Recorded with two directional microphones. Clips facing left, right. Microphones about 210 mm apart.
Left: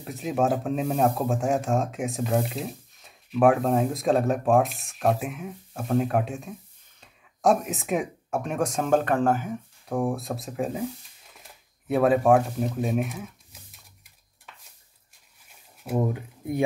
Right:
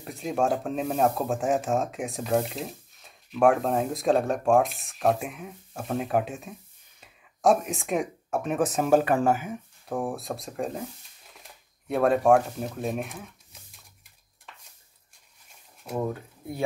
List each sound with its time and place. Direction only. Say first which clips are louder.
0.0 s speech: left 1 dB; centre (ahead or behind)
15.8 s speech: left 3 dB; 5° left (ahead or behind)
16.2 s speech: left 7 dB; 15° left (ahead or behind)